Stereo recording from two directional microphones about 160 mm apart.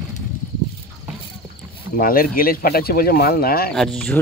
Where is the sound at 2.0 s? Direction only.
65° left (ahead or behind).